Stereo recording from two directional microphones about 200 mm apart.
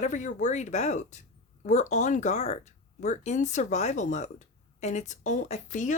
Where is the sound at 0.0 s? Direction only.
40° left (ahead or behind).